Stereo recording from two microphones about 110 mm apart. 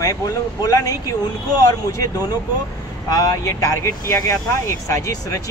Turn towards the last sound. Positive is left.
turn(degrees=30)  # may be behind; listen again after turning